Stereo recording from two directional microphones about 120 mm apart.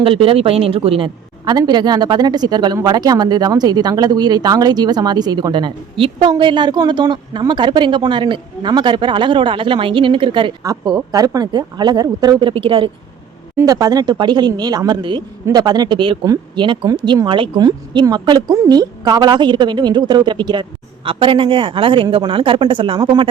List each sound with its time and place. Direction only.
0.0 s a woman's voice: 50° right (ahead or behind)
1.5 s speech: 35° right (ahead or behind)
10.6 s speech: 30° right (ahead or behind); by 12.9 s 45° right (ahead or behind)
13.6 s speech: 30° right (ahead or behind)